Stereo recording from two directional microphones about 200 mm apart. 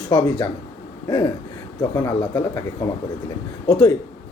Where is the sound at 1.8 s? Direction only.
20° left (ahead or behind).